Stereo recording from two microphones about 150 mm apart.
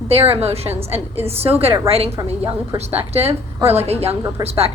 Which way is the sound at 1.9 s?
40° right (ahead or behind).